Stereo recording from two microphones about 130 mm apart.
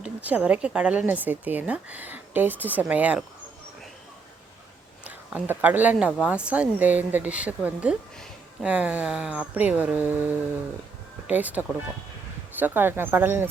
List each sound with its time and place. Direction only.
0.0 s speech: 10° right (ahead or behind)
5.0 s speech: 15° right (ahead or behind)